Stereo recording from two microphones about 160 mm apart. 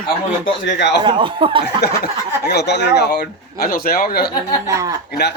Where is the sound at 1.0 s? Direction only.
30° right (ahead or behind).